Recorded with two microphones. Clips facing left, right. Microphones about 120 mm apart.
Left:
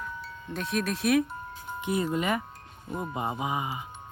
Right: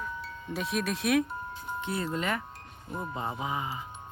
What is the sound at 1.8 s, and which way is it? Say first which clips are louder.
Speech: left 5 dB; 15° left (ahead or behind).